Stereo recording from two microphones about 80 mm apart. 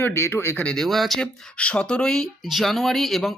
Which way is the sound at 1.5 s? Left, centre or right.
Centre.